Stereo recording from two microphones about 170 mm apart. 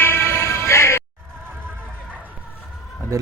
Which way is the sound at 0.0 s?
15° left (ahead or behind).